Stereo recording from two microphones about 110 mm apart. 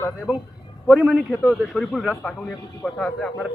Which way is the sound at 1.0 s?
10° right (ahead or behind).